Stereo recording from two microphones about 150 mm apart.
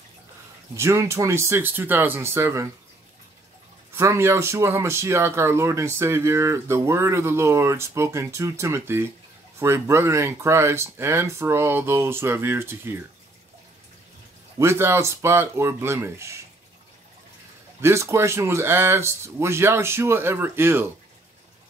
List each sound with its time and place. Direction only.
0.7 s speech: 20° right (ahead or behind)
3.9 s speech: 20° right (ahead or behind)
14.6 s speech: 15° right (ahead or behind)
17.7 s speech: 15° right (ahead or behind)